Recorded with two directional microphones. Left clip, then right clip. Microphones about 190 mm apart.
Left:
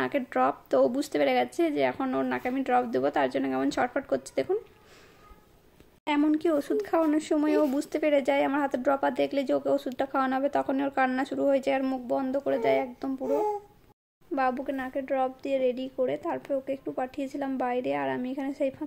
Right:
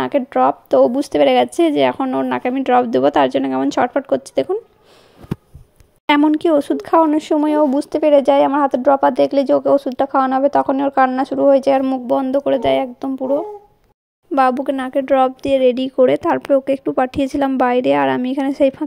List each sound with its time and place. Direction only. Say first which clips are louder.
0.0 s speech: right 11 dB; 30° right (ahead or behind)
6.2 s speech: right 11 dB; 35° right (ahead or behind)
14.3 s speech: right 13 dB; 40° right (ahead or behind)